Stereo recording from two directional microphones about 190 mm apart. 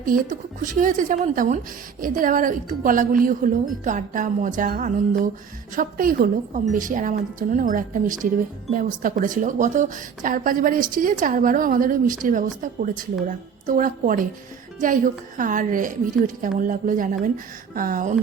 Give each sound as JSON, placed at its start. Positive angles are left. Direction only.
{"t": 0.0, "sound": "speech", "side_deg": -45}